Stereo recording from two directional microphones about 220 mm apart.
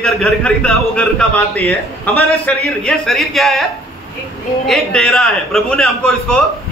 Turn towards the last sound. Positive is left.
turn(degrees=5)  # may be behind; listen again after turning